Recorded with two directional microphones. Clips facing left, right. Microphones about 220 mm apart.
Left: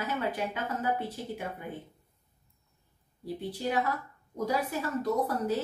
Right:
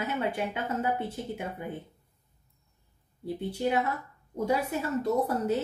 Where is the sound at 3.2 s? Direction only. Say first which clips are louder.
Right 3 dB; 25° right (ahead or behind).